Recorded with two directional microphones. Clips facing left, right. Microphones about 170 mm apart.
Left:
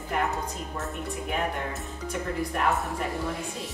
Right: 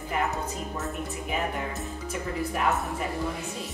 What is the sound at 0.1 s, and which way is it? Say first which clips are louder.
A woman's voice: even; centre (ahead or behind).